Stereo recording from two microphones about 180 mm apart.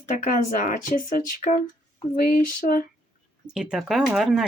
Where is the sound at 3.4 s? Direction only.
5° right (ahead or behind).